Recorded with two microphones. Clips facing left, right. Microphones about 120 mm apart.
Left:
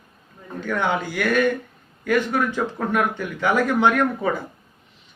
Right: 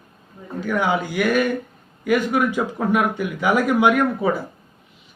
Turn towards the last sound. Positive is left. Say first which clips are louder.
# right 2 dB
turn(degrees=-10)  # may be behind; listen again after turning